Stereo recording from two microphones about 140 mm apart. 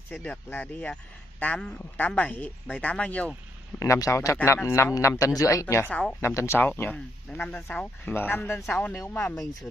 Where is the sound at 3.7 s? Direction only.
25° left (ahead or behind).